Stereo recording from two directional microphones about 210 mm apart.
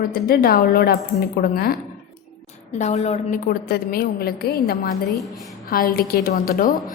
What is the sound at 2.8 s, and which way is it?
A woman's voice, 30° left (ahead or behind).